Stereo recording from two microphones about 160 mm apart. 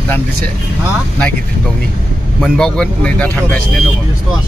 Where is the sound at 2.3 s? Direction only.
Centre (ahead or behind).